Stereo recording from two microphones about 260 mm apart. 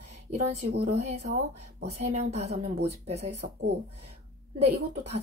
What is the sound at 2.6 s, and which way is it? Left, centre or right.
Speech, right.